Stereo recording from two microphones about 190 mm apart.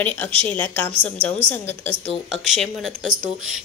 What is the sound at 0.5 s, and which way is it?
A woman's voice, 10° left (ahead or behind).